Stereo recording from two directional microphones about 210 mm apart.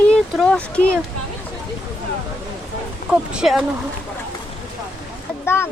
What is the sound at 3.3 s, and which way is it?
Speech, centre (ahead or behind).